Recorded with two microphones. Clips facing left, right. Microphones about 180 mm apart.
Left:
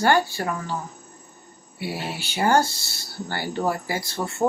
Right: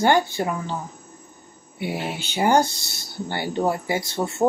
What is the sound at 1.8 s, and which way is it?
Speech, 20° right (ahead or behind).